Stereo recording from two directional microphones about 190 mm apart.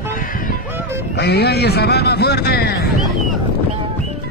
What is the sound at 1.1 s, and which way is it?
Speech, 60° left (ahead or behind).